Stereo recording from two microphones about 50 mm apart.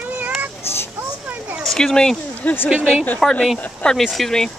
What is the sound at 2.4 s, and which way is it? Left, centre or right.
Speech, left.